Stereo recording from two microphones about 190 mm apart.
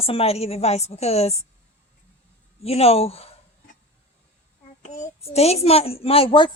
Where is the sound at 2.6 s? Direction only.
30° left (ahead or behind).